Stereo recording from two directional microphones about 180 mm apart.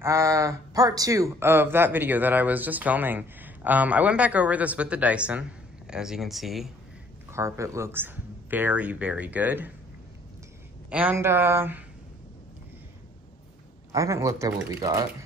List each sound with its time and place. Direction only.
0.0 s speech: 15° right (ahead or behind); by 6.7 s centre (ahead or behind)
7.2 s speech: 15° right (ahead or behind)
10.9 s speech: 10° right (ahead or behind)
13.9 s speech: 15° right (ahead or behind)